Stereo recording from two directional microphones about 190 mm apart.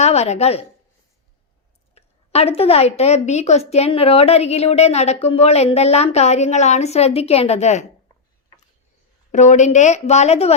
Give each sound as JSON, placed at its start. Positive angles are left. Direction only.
{"t": 0.0, "sound": "a woman's voice", "side_deg": 35}
{"t": 2.0, "sound": "a woman's voice", "side_deg": 30}
{"t": 9.3, "sound": "a woman's voice", "side_deg": 40}